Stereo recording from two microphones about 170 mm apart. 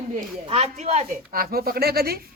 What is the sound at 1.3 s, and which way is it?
Speech, 60° right (ahead or behind).